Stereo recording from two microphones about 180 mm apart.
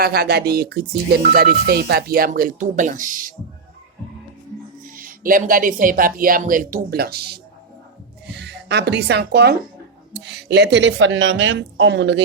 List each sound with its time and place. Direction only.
0.0 s speech: 60° right (ahead or behind)
4.9 s a woman's voice: 50° right (ahead or behind); by 12.2 s 85° right